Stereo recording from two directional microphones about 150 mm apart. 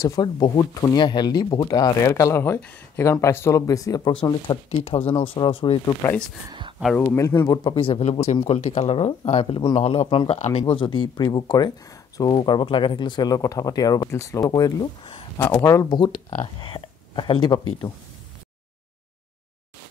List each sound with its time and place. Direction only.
0.0 s speech: 25° left (ahead or behind)
6.0 s speech: 15° left (ahead or behind)
7.7 s speech: 40° left (ahead or behind)